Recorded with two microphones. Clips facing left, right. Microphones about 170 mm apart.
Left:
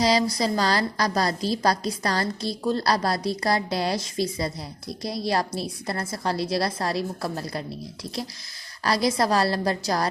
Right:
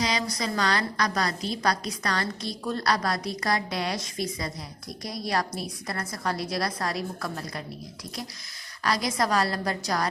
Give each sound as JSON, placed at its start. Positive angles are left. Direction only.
{"t": 0.0, "sound": "a woman's voice", "side_deg": 35}
{"t": 8.8, "sound": "a woman's voice", "side_deg": 35}